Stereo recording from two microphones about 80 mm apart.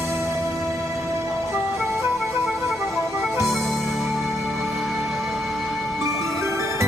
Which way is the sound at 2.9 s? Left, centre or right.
Centre.